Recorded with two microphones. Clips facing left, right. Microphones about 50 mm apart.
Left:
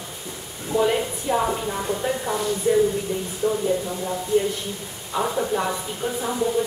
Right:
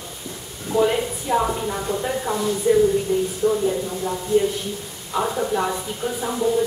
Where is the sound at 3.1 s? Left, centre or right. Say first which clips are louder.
Right 6 dB; left.